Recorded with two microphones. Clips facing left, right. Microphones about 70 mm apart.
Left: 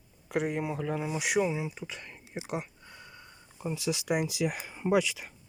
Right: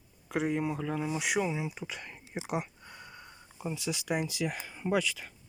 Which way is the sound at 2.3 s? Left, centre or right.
Right.